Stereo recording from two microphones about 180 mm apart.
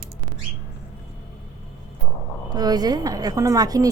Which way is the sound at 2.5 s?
20° right (ahead or behind).